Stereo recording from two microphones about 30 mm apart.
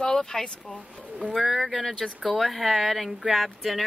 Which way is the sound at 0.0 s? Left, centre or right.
Centre.